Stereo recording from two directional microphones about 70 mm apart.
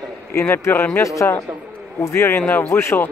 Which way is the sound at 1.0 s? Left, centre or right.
Left.